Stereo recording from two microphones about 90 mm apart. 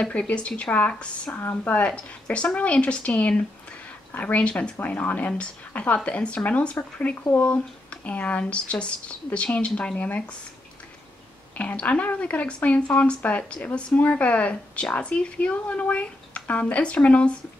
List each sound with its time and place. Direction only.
0.0 s speech: 10° left (ahead or behind)
1.4 s speech: 25° left (ahead or behind)
11.5 s speech: 15° left (ahead or behind)